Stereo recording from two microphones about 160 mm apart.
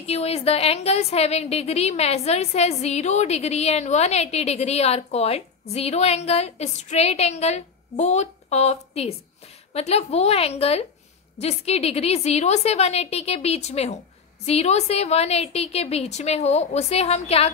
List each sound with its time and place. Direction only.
0.0 s a woman's voice: 40° left (ahead or behind)